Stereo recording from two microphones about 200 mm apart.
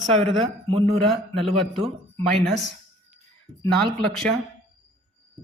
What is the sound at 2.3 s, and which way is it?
Speech, centre (ahead or behind).